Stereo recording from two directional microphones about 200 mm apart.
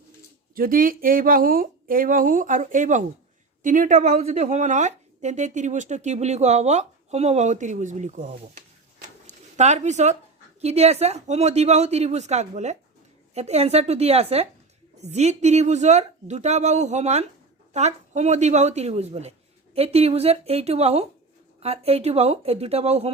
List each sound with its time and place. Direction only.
0.5 s speech: 45° right (ahead or behind)